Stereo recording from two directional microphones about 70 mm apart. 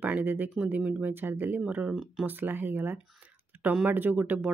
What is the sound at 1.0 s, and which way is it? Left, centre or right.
Speech, right.